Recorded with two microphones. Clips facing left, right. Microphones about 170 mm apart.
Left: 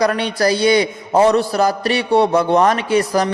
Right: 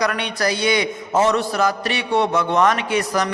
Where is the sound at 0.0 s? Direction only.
30° left (ahead or behind).